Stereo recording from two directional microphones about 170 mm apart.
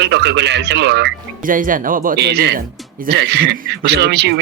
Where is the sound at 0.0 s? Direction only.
90° right.